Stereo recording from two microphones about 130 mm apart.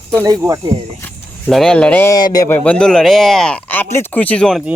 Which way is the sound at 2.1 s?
30° left (ahead or behind).